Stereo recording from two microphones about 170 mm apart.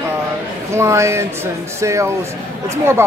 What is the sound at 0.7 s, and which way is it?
Speech, 15° right (ahead or behind).